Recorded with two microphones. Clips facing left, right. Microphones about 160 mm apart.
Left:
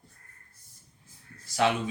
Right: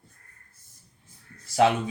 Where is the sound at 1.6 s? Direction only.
35° right (ahead or behind).